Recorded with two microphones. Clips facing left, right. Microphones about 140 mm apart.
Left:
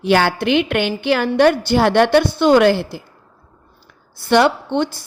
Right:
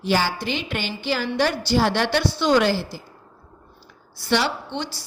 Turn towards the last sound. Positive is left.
turn(degrees=55)  # may be behind; listen again after turning